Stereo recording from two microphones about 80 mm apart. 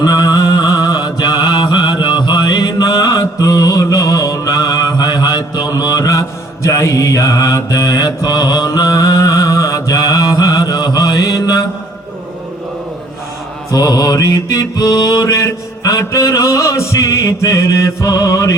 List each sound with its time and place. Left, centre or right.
0.0 s mantra: left
13.7 s mantra: left